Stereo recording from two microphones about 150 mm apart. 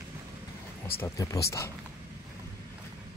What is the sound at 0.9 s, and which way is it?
Speech, 20° left (ahead or behind).